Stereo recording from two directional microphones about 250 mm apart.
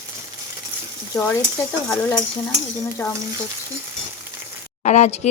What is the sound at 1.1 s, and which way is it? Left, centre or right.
Stir, centre.